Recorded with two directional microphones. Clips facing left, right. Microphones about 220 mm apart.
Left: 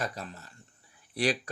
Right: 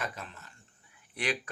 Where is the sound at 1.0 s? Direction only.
35° left (ahead or behind).